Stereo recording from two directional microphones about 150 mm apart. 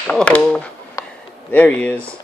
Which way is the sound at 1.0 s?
20° left (ahead or behind).